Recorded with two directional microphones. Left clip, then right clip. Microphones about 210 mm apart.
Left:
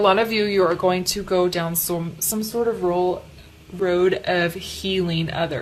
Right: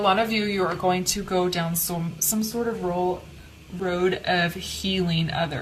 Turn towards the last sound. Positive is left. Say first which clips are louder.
# left 2 dB
turn(degrees=35)  # may be behind; listen again after turning